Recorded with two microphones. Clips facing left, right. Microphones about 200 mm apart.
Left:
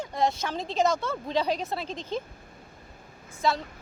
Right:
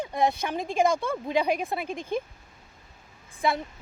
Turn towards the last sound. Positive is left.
turn(degrees=-15)  # may be behind; listen again after turning